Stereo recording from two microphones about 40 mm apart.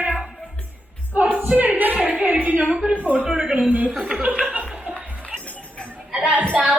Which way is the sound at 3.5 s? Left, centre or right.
Right.